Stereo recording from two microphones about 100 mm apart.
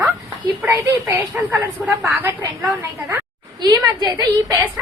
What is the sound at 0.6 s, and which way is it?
A woman's voice, 20° right (ahead or behind).